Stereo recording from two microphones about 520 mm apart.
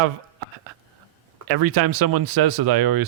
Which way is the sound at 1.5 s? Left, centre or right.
Right.